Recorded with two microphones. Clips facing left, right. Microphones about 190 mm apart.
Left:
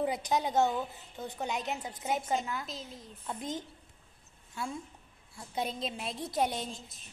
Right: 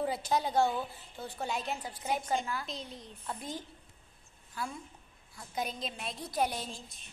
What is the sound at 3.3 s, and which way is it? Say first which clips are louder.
A woman's voice: left 3 dB; 20° left (ahead or behind).